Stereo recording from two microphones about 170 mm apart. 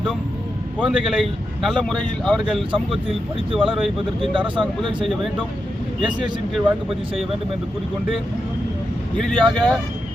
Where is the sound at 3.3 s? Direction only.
30° right (ahead or behind).